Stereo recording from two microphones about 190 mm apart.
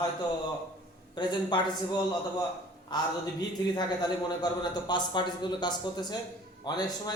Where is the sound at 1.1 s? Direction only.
25° left (ahead or behind).